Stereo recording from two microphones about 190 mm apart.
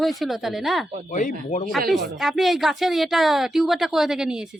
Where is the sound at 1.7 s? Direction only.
Centre (ahead or behind).